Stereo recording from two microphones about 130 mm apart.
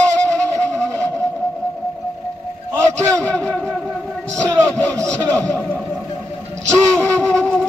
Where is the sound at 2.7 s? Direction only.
20° right (ahead or behind).